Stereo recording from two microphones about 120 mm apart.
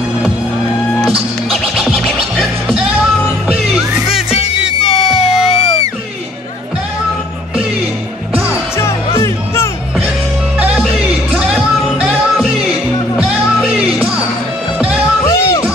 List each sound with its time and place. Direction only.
1.1 s music: 5° right (ahead or behind)
4.1 s music: 55° left (ahead or behind)
8.5 s music: 25° left (ahead or behind)
11.3 s music: 5° right (ahead or behind)
13.7 s music: 5° right (ahead or behind)
15.2 s music: 25° left (ahead or behind)